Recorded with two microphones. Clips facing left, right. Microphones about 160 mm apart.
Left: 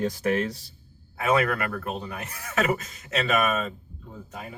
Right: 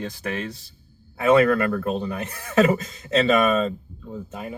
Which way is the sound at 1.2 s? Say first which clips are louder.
Right 7 dB; 30° right (ahead or behind).